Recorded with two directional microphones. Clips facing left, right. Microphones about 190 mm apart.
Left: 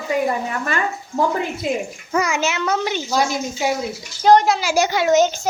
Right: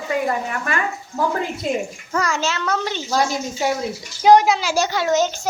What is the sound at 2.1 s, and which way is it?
A woman's voice, 15° left (ahead or behind).